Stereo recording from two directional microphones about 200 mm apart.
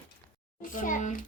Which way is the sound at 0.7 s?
40° left (ahead or behind).